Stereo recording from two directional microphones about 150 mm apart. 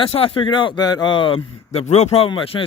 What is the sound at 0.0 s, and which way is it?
Speech, 35° left (ahead or behind).